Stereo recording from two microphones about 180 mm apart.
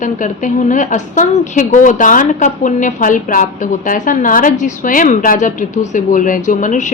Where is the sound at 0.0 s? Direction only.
45° left (ahead or behind).